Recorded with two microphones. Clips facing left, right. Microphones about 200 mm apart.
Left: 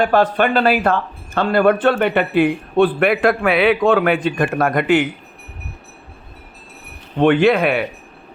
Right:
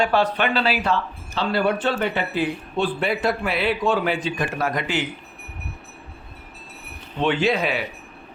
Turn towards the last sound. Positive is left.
turn(degrees=60)  # may be behind; listen again after turning